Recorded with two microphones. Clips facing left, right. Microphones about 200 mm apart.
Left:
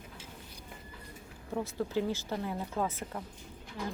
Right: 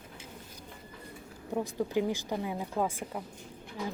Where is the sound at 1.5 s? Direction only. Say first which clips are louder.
Right 2 dB; 15° right (ahead or behind).